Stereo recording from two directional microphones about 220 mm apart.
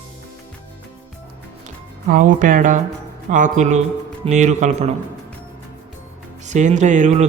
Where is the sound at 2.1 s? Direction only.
35° right (ahead or behind).